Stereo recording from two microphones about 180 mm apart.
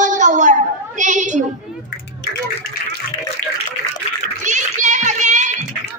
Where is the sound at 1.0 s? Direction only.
45° right (ahead or behind).